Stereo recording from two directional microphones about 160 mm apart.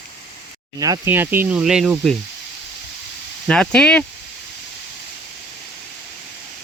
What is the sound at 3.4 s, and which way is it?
Speech, 5° left (ahead or behind).